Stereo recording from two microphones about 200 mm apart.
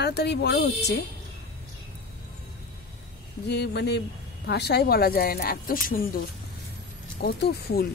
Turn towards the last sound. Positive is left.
turn(degrees=50)  # may be behind; listen again after turning